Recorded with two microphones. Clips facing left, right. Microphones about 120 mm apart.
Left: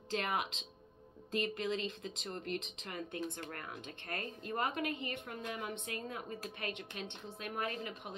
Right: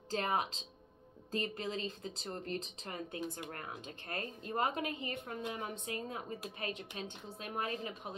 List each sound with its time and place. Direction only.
0.1 s speech: 35° right (ahead or behind)